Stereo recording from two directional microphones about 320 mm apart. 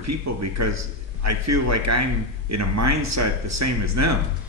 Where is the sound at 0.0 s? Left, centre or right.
Right.